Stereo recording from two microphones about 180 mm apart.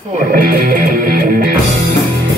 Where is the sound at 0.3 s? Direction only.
60° right (ahead or behind).